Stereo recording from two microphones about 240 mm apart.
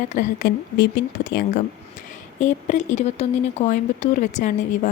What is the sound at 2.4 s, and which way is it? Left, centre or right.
A woman's voice, left.